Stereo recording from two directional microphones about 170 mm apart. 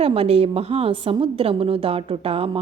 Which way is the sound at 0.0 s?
35° right (ahead or behind).